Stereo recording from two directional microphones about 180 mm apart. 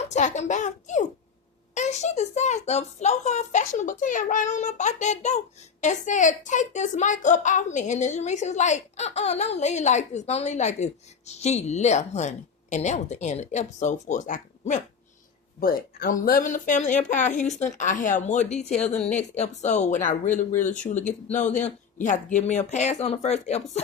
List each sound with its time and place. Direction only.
0.0 s a woman's voice: 40° left (ahead or behind)